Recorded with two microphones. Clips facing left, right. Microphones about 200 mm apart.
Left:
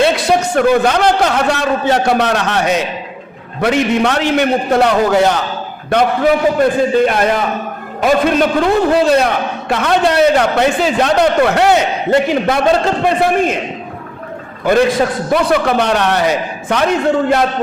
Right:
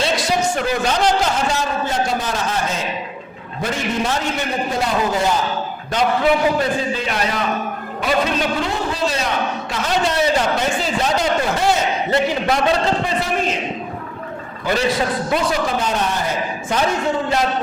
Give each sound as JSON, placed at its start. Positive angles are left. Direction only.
{"t": 0.0, "sound": "a man's voice", "side_deg": 55}
{"t": 5.9, "sound": "a man's voice", "side_deg": 60}
{"t": 14.6, "sound": "a man's voice", "side_deg": 55}